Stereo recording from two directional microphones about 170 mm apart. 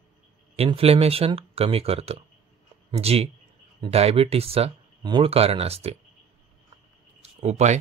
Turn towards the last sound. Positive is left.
turn(degrees=-40)  # may be behind; listen again after turning